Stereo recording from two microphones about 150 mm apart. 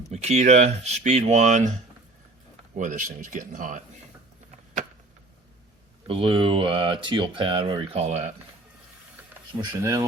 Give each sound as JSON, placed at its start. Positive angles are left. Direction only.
{"t": 0.1, "sound": "speech", "side_deg": -45}
{"t": 2.7, "sound": "speech", "side_deg": -60}
{"t": 6.1, "sound": "speech", "side_deg": -35}
{"t": 9.8, "sound": "speech", "side_deg": -20}